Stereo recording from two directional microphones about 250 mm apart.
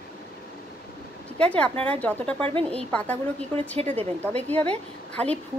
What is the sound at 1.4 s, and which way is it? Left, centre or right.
Speech, centre.